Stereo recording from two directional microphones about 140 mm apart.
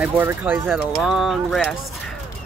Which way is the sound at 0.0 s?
15° right (ahead or behind).